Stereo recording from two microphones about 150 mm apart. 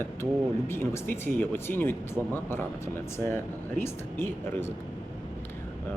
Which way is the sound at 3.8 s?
15° left (ahead or behind).